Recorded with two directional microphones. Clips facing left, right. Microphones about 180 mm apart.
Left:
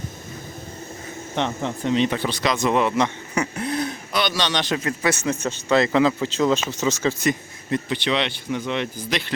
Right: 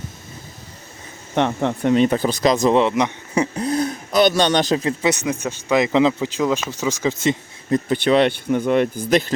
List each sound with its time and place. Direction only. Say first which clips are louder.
1.4 s speech: right 6 dB; 60° right (ahead or behind); by 4.9 s 35° right (ahead or behind)
5.0 s a man's voice: right 2 dB; 15° right (ahead or behind)
7.7 s speech: right 6 dB; 50° right (ahead or behind)